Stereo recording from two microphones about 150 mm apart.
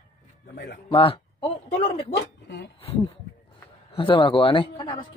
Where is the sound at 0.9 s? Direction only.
35° left (ahead or behind).